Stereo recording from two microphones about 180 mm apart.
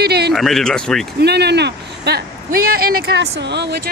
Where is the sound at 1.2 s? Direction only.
65° right (ahead or behind).